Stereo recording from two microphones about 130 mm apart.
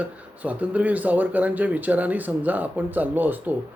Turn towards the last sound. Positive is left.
turn(degrees=-15)  # may be behind; listen again after turning